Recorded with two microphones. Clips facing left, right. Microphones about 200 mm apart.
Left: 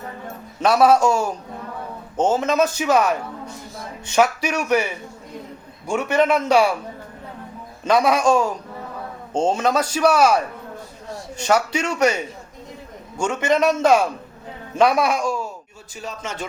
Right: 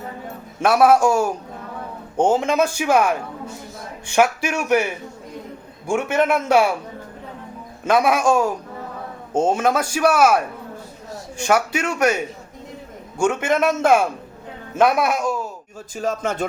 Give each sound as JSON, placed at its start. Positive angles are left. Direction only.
{"t": 0.6, "sound": "a man's voice", "side_deg": -10}
{"t": 7.9, "sound": "a man's voice", "side_deg": -5}
{"t": 13.1, "sound": "a man's voice", "side_deg": -10}
{"t": 16.0, "sound": "speech", "side_deg": -50}